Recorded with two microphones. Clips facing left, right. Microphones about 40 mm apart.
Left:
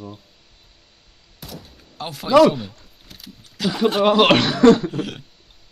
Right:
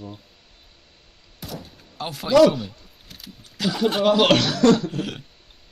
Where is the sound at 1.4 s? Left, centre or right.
Centre.